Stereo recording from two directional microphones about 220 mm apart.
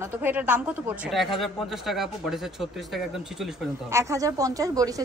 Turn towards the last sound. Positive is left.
turn(degrees=-15)  # may be behind; listen again after turning